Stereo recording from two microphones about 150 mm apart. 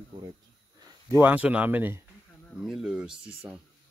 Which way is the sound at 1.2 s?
10° right (ahead or behind).